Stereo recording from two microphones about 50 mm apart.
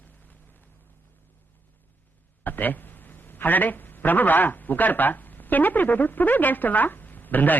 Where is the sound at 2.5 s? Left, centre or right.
Left.